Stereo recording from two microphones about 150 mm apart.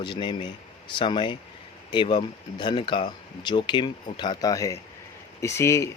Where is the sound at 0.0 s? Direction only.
30° left (ahead or behind).